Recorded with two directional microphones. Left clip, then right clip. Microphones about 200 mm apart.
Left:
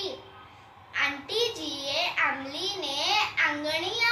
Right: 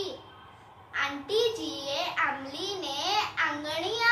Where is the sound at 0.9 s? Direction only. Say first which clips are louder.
Left 1 dB; 20° right (ahead or behind).